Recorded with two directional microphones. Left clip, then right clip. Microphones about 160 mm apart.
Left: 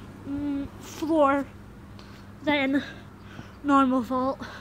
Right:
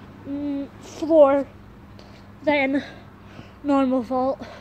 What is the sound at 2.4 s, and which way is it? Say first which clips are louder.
A woman's voice: right 4 dB; 20° left (ahead or behind).